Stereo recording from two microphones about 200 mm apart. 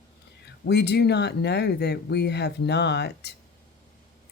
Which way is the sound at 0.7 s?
55° left (ahead or behind).